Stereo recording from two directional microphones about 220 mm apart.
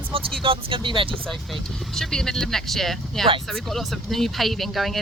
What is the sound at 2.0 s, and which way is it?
Speech, centre (ahead or behind).